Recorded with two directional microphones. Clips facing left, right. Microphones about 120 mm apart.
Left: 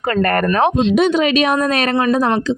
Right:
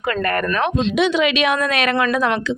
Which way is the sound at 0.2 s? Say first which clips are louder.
Left 7 dB; 45° left (ahead or behind).